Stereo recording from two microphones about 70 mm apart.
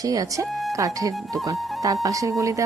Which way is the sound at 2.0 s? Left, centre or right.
Right.